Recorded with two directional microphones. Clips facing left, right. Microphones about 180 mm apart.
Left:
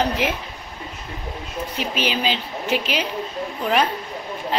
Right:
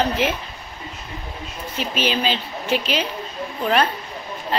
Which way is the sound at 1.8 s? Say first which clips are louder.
Right 2 dB; 15° left (ahead or behind).